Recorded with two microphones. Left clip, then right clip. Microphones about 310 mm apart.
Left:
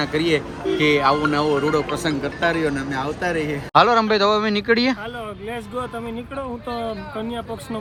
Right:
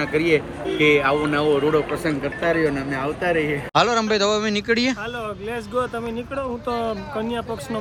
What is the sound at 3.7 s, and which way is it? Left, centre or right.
A man's voice, centre.